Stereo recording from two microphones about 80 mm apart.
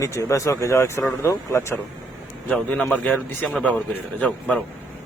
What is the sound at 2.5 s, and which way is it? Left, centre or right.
A man's voice, centre.